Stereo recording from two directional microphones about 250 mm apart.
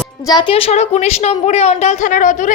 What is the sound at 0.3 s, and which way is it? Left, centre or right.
A woman's voice, centre.